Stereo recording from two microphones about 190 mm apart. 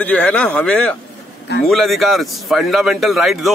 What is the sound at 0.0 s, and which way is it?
A man's voice, 5° left (ahead or behind).